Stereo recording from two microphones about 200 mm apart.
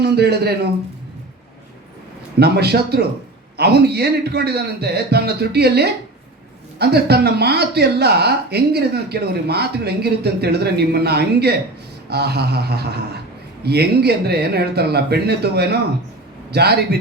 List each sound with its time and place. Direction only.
0.0 s speech: 55° right (ahead or behind)
2.4 s speech: 55° right (ahead or behind)